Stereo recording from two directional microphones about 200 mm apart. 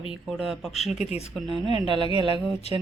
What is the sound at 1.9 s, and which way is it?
Speech, 25° left (ahead or behind).